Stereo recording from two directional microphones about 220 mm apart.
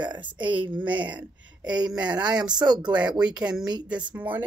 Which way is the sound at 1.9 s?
5° right (ahead or behind).